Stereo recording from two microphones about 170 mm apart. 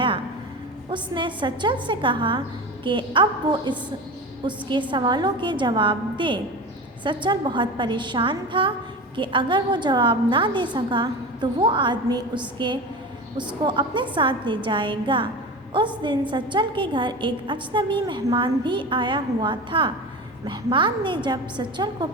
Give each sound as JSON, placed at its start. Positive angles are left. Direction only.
{"t": 0.9, "sound": "a woman's voice", "side_deg": -30}
{"t": 4.4, "sound": "a woman's voice", "side_deg": -30}